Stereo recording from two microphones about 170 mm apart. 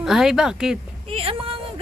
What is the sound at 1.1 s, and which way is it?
Speech, 35° right (ahead or behind).